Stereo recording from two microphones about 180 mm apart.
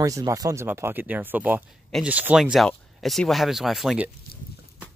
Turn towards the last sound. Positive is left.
turn(degrees=0)  # may be behind; listen again after turning